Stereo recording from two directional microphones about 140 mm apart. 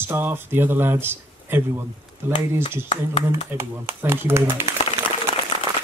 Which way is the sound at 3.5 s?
15° right (ahead or behind).